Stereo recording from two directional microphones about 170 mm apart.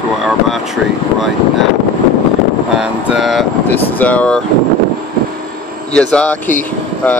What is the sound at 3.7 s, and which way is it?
Speech, 10° left (ahead or behind).